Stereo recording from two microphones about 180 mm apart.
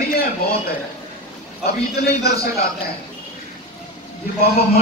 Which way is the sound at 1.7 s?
60° left (ahead or behind).